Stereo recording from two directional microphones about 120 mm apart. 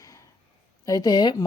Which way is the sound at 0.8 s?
30° left (ahead or behind).